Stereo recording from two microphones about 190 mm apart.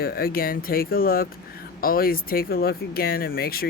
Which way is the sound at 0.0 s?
55° left (ahead or behind).